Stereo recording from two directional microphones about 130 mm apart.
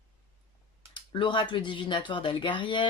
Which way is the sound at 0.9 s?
40° left (ahead or behind).